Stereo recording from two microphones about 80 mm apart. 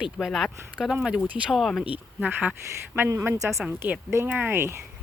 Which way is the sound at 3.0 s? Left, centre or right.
Right.